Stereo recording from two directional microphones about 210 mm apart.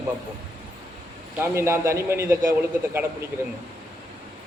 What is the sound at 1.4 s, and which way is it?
A man's voice, 10° right (ahead or behind).